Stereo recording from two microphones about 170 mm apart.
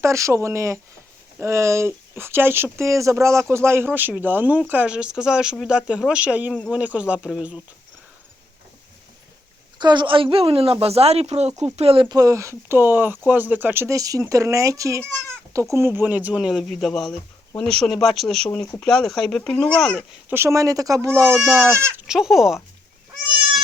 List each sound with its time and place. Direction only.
0.0 s speech: 15° right (ahead or behind)
9.7 s speech: 25° right (ahead or behind); by 20.1 s 5° left (ahead or behind)
20.3 s speech: 15° right (ahead or behind)
22.0 s speech: 5° right (ahead or behind)